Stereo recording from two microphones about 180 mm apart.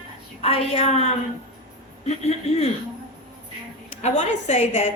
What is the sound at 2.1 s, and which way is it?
Speech, 35° left (ahead or behind).